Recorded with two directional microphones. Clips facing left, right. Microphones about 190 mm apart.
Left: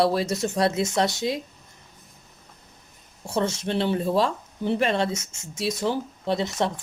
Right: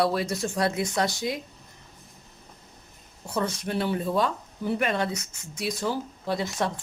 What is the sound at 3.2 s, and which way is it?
Speech, 25° left (ahead or behind).